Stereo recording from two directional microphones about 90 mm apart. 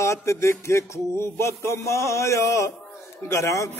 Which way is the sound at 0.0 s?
35° left (ahead or behind).